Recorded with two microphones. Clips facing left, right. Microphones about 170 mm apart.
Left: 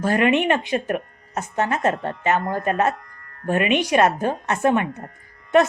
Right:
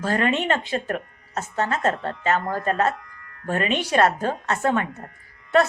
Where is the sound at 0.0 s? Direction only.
15° left (ahead or behind).